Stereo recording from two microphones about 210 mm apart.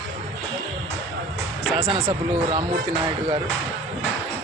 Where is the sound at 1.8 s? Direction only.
25° right (ahead or behind).